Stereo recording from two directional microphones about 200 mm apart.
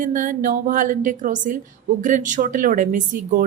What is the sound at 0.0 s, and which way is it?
A woman's voice, 40° right (ahead or behind).